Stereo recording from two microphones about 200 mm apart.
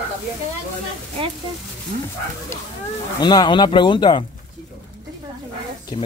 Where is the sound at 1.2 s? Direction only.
25° right (ahead or behind).